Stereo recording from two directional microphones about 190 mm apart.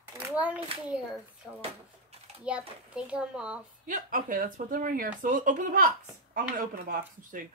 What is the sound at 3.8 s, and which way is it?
Speech, 45° right (ahead or behind).